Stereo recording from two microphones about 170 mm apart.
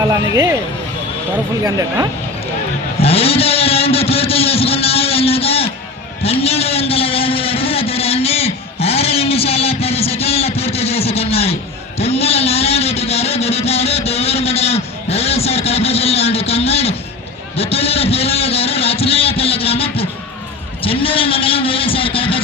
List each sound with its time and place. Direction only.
0.0 s speech: 20° right (ahead or behind)
1.6 s speech: 20° right (ahead or behind)
3.0 s speech: 35° left (ahead or behind)
11.9 s a sound: 35° left (ahead or behind)
20.8 s speech: 30° left (ahead or behind)